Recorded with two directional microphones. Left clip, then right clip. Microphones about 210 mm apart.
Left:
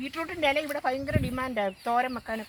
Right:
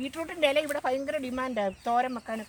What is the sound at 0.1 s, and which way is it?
Speech, 45° right (ahead or behind).